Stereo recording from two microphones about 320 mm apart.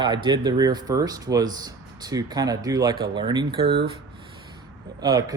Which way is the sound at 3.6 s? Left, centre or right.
Right.